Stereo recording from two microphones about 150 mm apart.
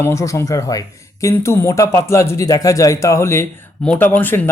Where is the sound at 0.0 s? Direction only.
20° left (ahead or behind).